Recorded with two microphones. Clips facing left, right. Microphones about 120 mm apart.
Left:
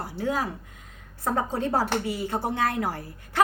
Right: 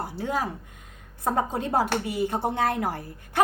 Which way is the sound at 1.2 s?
15° right (ahead or behind).